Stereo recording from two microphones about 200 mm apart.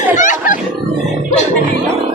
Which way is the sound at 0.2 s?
40° left (ahead or behind).